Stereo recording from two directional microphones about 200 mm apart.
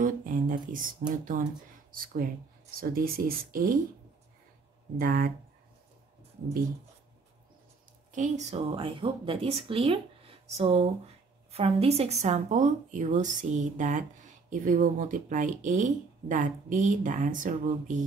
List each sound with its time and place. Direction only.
0.0 s speech: 40° right (ahead or behind)
4.9 s speech: 45° right (ahead or behind)
8.1 s speech: 35° right (ahead or behind)